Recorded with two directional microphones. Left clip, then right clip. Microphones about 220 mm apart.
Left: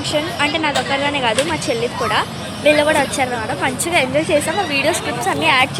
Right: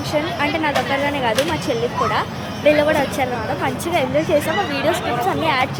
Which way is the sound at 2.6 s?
10° left (ahead or behind).